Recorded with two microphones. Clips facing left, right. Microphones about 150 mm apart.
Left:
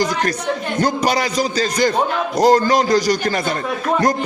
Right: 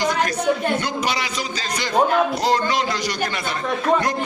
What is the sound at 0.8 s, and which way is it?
A man's voice, 40° left (ahead or behind).